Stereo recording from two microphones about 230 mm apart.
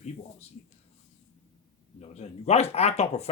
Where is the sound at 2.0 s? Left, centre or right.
Left.